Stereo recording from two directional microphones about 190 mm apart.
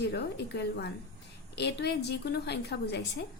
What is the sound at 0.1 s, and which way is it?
A woman's voice, 60° left (ahead or behind).